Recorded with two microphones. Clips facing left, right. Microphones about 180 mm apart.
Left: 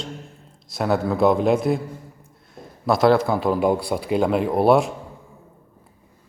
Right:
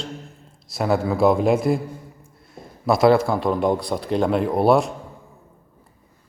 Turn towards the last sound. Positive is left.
turn(degrees=0)  # may be behind; listen again after turning